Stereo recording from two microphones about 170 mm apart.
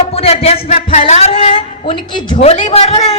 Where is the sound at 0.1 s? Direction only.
35° left (ahead or behind).